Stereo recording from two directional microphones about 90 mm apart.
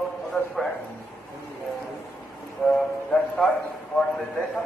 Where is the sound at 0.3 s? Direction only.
20° left (ahead or behind).